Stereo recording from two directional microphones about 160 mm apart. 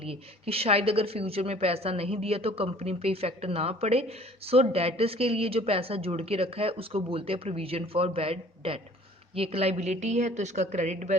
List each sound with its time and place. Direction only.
0.0 s a woman's voice: 35° right (ahead or behind)